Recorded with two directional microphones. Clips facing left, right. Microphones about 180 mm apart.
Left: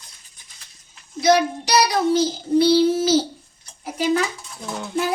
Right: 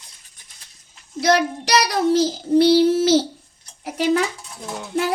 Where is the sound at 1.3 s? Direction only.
85° right.